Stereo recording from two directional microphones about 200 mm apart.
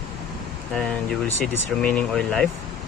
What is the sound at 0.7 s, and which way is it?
Speech, 5° left (ahead or behind).